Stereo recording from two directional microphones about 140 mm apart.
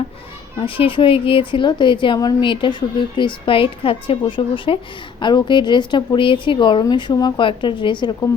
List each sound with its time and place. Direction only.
0.5 s speech: 40° left (ahead or behind)